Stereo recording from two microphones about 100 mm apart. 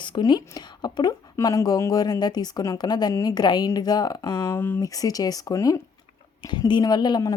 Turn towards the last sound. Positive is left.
turn(degrees=45)  # may be behind; listen again after turning